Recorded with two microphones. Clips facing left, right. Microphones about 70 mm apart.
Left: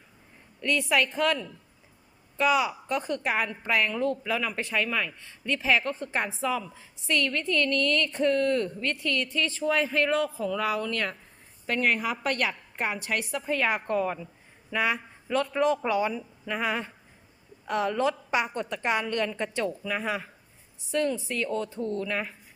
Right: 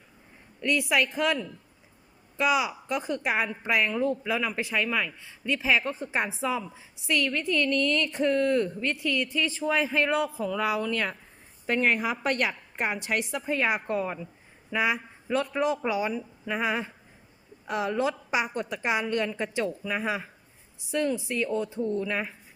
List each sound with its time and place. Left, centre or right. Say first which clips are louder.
0.6 s a woman's voice: even; centre